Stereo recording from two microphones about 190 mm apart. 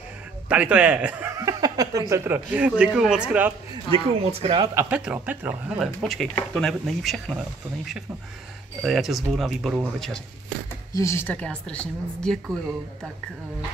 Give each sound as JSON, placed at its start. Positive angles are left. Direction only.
{"t": 0.5, "sound": "speech", "side_deg": -5}
{"t": 3.9, "sound": "speech", "side_deg": -30}
{"t": 4.7, "sound": "speech", "side_deg": -5}
{"t": 8.8, "sound": "speech", "side_deg": 0}
{"t": 10.9, "sound": "a woman's voice", "side_deg": 15}